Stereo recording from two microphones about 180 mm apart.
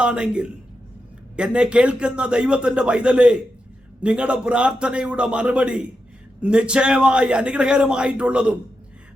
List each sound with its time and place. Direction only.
0.0 s a man's voice: 5° right (ahead or behind)